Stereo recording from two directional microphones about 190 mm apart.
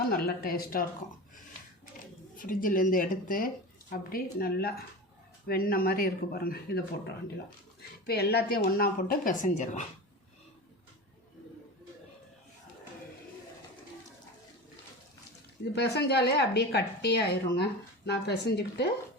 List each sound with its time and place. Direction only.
0.1 s speech: 50° left (ahead or behind)
2.4 s speech: 45° left (ahead or behind)
8.0 s a woman's voice: 55° left (ahead or behind); by 9.8 s 40° left (ahead or behind)
15.7 s a woman's voice: 60° left (ahead or behind)